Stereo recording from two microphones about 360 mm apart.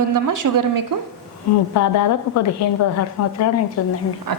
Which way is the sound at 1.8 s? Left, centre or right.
Left.